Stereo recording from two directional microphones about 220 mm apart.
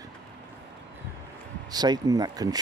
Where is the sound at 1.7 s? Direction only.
20° right (ahead or behind).